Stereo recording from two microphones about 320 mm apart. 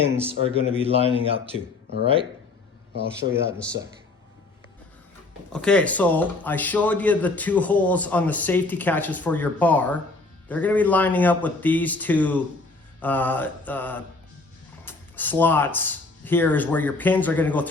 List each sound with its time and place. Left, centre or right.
0.0 s a man's voice: centre
2.9 s a man's voice: right
5.5 s speech: centre